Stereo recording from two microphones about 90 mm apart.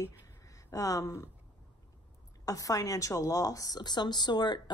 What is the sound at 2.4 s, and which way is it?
A woman's voice, 40° left (ahead or behind).